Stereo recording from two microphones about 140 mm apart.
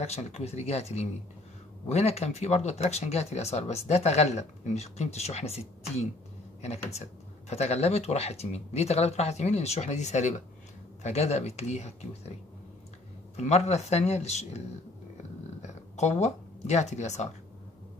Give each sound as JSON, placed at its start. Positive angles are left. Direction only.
{"t": 0.0, "sound": "speech", "side_deg": 50}
{"t": 13.4, "sound": "speech", "side_deg": 50}
{"t": 15.6, "sound": "speech", "side_deg": 55}